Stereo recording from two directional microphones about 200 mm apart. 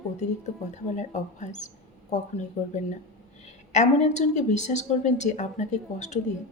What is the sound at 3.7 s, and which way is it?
A woman's voice, 35° left (ahead or behind).